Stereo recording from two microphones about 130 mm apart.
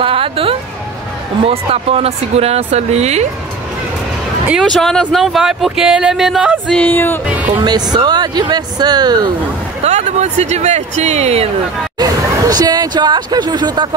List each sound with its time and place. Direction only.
0.0 s speech: 45° right (ahead or behind)
4.6 s speech: 5° left (ahead or behind)
6.7 s speech: 15° left (ahead or behind)
7.2 s speech: 10° right (ahead or behind)
7.6 s speech: 30° right (ahead or behind)
9.8 s speech: 60° right (ahead or behind)
12.0 s speech: 30° right (ahead or behind)